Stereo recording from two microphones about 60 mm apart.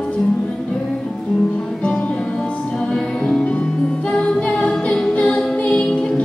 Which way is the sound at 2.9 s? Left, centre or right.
Centre.